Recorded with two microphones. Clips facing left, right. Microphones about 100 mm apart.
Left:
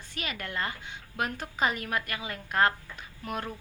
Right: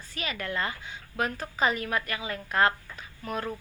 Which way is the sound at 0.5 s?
35° right (ahead or behind).